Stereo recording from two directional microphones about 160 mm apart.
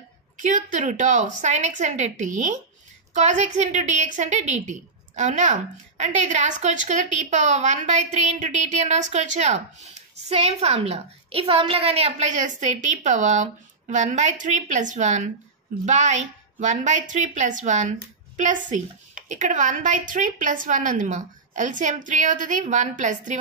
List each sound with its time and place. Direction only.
0.4 s a woman's voice: 55° right (ahead or behind)